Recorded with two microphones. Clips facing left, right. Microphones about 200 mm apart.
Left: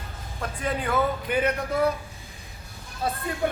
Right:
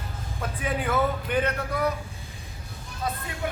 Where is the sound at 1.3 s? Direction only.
10° left (ahead or behind).